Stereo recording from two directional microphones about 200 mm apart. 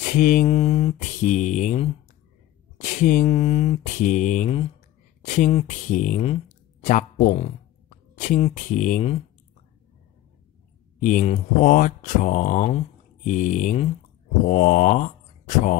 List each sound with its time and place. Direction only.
0.1 s speech: 40° left (ahead or behind)
11.0 s speech: 40° left (ahead or behind)
14.5 s mantra: 45° left (ahead or behind)